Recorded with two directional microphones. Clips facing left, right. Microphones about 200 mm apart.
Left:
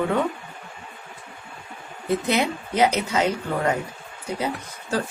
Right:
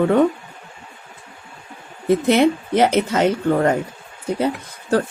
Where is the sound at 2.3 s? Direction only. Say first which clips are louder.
Right 8 dB; 50° right (ahead or behind).